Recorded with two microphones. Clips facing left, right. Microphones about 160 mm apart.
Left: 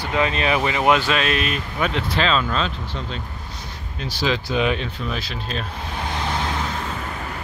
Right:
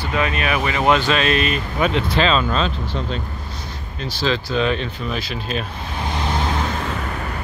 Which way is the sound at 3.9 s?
10° left (ahead or behind).